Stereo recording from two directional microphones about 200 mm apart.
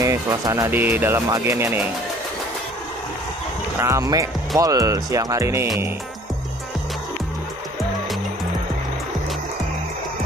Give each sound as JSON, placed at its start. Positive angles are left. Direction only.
{"t": 0.0, "sound": "speech", "side_deg": -15}
{"t": 3.8, "sound": "speech", "side_deg": -15}